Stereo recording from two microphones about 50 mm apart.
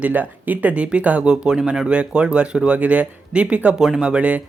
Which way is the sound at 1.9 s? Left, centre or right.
Right.